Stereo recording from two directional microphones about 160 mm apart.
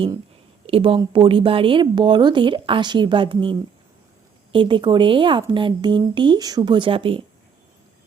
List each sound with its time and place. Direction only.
0.7 s speech: 35° right (ahead or behind)